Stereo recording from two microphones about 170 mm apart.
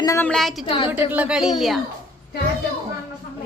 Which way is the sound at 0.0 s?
20° left (ahead or behind).